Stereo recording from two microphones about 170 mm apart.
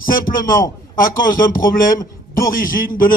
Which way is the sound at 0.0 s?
55° left (ahead or behind).